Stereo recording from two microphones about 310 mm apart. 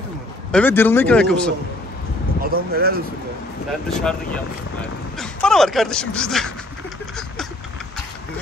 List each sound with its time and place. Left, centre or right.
0.5 s a man's voice: centre
2.4 s speech: right
3.9 s a man's voice: centre